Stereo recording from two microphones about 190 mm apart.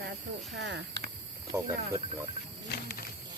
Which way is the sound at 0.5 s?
65° right (ahead or behind).